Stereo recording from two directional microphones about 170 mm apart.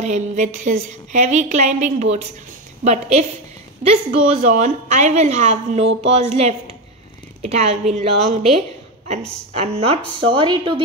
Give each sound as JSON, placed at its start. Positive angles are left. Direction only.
{"t": 0.0, "sound": "a woman's voice", "side_deg": -45}